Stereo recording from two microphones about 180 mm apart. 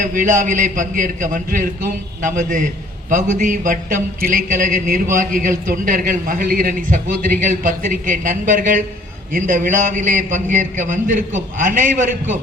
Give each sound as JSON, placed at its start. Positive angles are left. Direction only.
{"t": 0.0, "sound": "a man's voice", "side_deg": -50}